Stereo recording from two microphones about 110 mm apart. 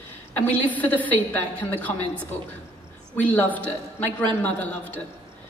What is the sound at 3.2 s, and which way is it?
Speech, 15° left (ahead or behind).